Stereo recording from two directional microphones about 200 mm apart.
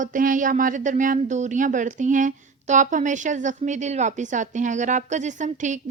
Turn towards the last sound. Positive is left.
turn(degrees=-35)  # may be behind; listen again after turning